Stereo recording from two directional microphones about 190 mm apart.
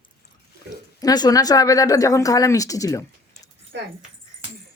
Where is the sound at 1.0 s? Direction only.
20° left (ahead or behind).